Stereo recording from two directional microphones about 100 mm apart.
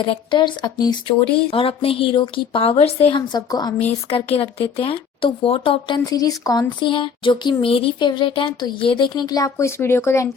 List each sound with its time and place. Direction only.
0.1 s speech: 55° left (ahead or behind)
1.0 s speech: 65° left (ahead or behind); by 3.2 s 90° left
3.2 s speech: 45° left (ahead or behind)
4.1 s speech: 75° left (ahead or behind)
6.1 s speech: 35° left (ahead or behind)
6.9 s speech: 50° left (ahead or behind); by 10.2 s 25° left (ahead or behind)